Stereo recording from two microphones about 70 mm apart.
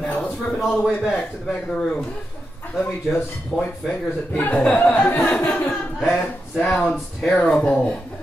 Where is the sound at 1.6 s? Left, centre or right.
Centre.